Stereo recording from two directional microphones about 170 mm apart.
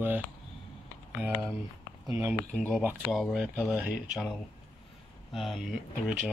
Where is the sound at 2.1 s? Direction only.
20° right (ahead or behind).